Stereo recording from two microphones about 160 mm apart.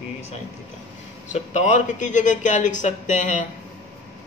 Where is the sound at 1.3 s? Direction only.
45° left (ahead or behind).